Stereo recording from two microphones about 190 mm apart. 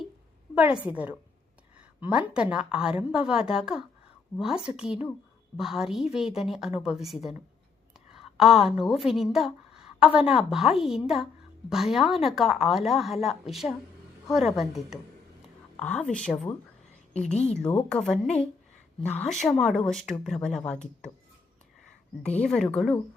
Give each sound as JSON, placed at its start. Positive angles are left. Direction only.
{"t": 0.5, "sound": "a woman's voice", "side_deg": -5}
{"t": 8.4, "sound": "a woman's voice", "side_deg": 0}
{"t": 17.3, "sound": "a woman's voice", "side_deg": 35}
{"t": 17.6, "sound": "a woman's voice", "side_deg": 5}
{"t": 22.4, "sound": "a woman's voice", "side_deg": 5}